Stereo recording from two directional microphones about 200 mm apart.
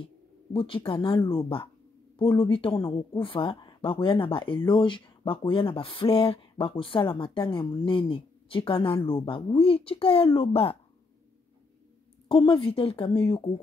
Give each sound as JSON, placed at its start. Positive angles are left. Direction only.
{"t": 0.0, "sound": "speech", "side_deg": 25}
{"t": 12.3, "sound": "speech", "side_deg": 25}